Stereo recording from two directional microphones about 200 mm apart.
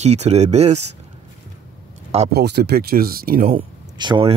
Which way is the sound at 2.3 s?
55° right (ahead or behind).